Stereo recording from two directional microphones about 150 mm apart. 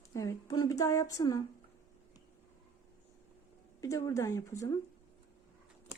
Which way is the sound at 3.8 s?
20° left (ahead or behind).